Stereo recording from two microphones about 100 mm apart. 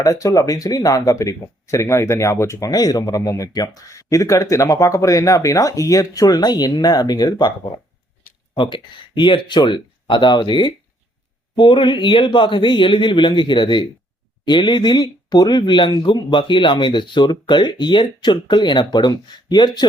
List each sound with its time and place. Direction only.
0.0 s speech: 35° left (ahead or behind)
8.5 s speech: 55° left (ahead or behind)